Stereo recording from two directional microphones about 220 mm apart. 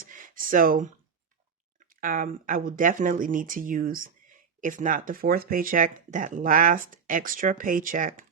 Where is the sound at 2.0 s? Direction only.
40° right (ahead or behind).